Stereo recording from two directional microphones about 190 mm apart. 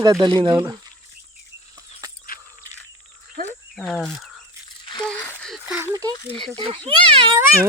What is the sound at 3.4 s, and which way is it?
Wild animals, 50° right (ahead or behind).